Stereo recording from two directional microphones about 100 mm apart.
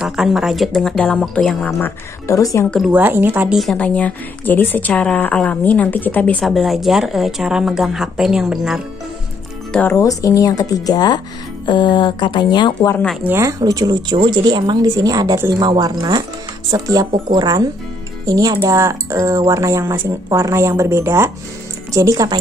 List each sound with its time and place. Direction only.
0.0 s a woman's voice: 5° right (ahead or behind)
1.8 s a woman's voice: 30° left (ahead or behind)
2.9 s speech: 20° right (ahead or behind)
3.7 s a woman's voice: 15° left (ahead or behind)
6.4 s a woman's voice: centre (ahead or behind)
9.7 s speech: 15° left (ahead or behind)
9.9 s speech: 35° left (ahead or behind)
11.6 s speech: 50° left (ahead or behind)
13.4 s speech: 35° right (ahead or behind)